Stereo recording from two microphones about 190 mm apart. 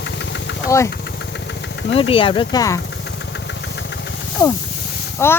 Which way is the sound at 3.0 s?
65° left (ahead or behind).